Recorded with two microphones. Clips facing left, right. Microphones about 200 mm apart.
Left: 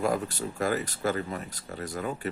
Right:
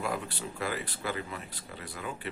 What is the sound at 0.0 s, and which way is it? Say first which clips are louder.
Speech: left 6 dB; 45° left (ahead or behind).